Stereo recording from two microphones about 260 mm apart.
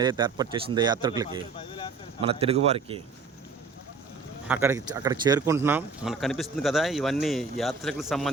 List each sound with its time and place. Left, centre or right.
0.0 s a man's voice: centre
1.5 s speech: centre
2.2 s speech: right
4.4 s speech: centre